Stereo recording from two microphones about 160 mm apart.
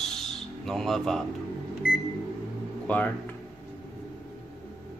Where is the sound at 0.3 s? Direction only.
Centre (ahead or behind).